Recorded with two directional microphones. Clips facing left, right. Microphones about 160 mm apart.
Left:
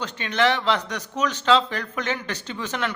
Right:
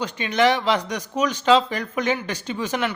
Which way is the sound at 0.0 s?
10° right (ahead or behind).